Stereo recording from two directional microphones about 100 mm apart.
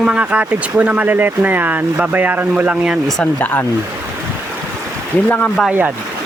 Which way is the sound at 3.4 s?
15° left (ahead or behind).